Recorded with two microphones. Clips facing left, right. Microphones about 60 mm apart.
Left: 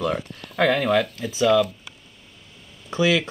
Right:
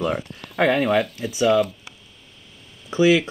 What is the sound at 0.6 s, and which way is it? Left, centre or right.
Speech, centre.